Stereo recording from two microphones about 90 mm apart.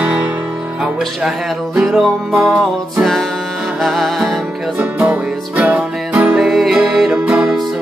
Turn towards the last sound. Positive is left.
turn(degrees=-5)  # may be behind; listen again after turning